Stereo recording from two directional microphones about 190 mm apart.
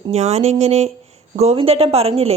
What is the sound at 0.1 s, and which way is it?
A woman's voice, 35° right (ahead or behind).